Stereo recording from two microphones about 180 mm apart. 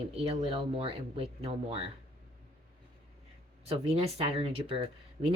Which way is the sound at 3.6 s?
35° right (ahead or behind).